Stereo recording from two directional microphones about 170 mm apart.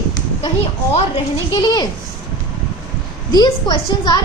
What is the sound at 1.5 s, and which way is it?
Speech, 25° left (ahead or behind).